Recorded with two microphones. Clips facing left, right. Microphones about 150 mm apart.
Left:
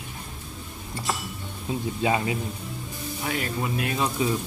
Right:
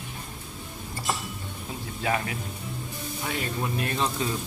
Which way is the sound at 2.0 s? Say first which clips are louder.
Left 3 dB; 20° left (ahead or behind).